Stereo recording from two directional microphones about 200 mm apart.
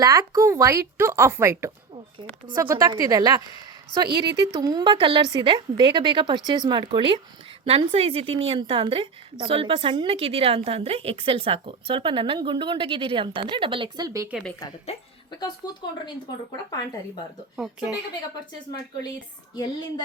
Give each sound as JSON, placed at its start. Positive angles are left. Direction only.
{"t": 0.0, "sound": "a woman's voice", "side_deg": -15}
{"t": 15.6, "sound": "speech", "side_deg": 20}
{"t": 17.6, "sound": "a woman's voice", "side_deg": -5}